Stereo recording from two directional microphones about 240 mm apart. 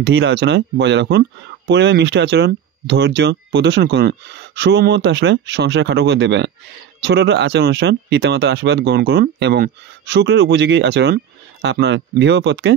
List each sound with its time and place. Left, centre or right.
0.0 s speech: right